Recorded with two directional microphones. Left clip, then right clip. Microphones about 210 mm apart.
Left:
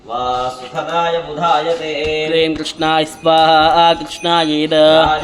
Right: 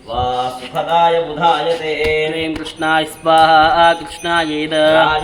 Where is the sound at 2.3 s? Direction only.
60° left (ahead or behind).